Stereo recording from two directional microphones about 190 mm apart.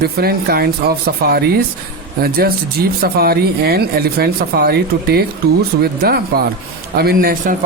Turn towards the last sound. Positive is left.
turn(degrees=-45)  # may be behind; listen again after turning